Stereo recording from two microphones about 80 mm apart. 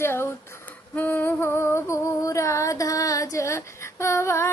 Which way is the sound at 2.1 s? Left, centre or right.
Left.